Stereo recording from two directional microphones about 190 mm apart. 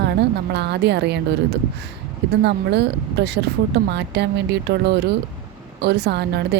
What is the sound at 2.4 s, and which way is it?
A woman's voice, 65° right (ahead or behind).